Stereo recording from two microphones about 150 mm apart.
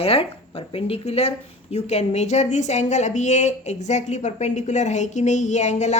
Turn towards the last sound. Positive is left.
turn(degrees=50)  # may be behind; listen again after turning